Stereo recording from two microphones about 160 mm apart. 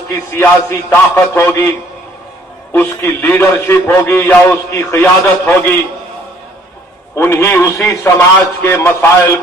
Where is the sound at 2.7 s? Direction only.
15° left (ahead or behind).